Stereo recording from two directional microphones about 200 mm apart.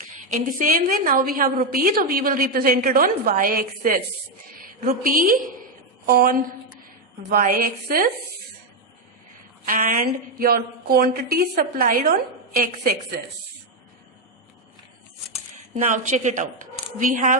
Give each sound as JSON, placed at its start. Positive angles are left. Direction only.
{"t": 0.0, "sound": "a woman's voice", "side_deg": -40}
{"t": 9.6, "sound": "a woman's voice", "side_deg": -40}
{"t": 15.7, "sound": "speech", "side_deg": -35}